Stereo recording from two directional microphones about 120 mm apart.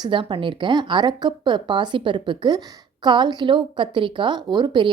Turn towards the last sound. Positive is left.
turn(degrees=-40)  # may be behind; listen again after turning